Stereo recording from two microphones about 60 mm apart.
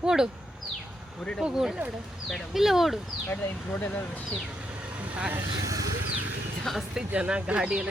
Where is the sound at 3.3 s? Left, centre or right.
Left.